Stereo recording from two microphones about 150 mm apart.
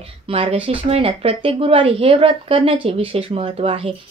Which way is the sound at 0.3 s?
40° right (ahead or behind).